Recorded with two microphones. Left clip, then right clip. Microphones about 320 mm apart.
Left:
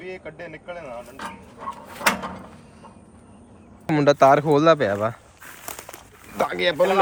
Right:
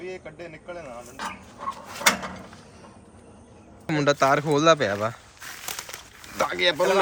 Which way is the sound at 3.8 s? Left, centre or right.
Centre.